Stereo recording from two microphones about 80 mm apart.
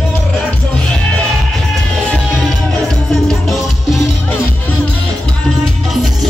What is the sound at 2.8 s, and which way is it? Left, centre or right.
Music, centre.